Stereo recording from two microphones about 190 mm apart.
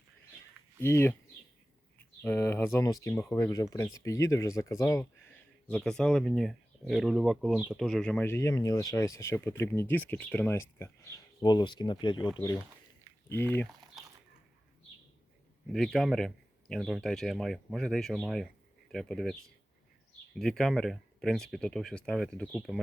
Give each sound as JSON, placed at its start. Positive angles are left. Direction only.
{"t": 0.8, "sound": "speech", "side_deg": 15}
{"t": 2.2, "sound": "speech", "side_deg": 10}
{"t": 3.1, "sound": "speech", "side_deg": 5}
{"t": 3.3, "sound": "speech", "side_deg": 15}
{"t": 13.2, "sound": "speech", "side_deg": 10}
{"t": 14.0, "sound": "a sound", "side_deg": 0}
{"t": 15.7, "sound": "speech", "side_deg": 0}